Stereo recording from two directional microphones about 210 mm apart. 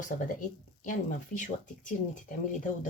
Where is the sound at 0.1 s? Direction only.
40° left (ahead or behind).